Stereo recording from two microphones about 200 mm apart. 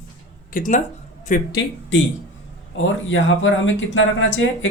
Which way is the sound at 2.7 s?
70° left (ahead or behind).